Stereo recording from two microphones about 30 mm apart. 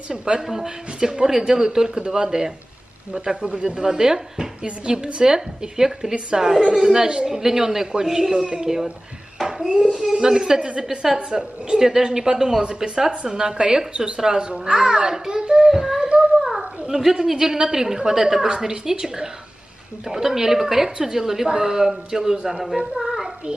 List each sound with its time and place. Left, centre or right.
0.1 s a woman's voice: right
7.2 s a man's voice: centre
10.1 s a woman's voice: right
13.1 s a woman's voice: right
13.4 s a woman's voice: right
15.7 s beatboxing: centre
16.2 s a sound: centre
16.8 s a woman's voice: right
20.1 s a man's voice: centre
23.0 s child singing: centre